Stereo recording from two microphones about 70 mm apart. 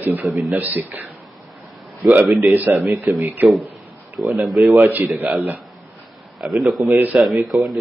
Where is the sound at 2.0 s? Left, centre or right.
Centre.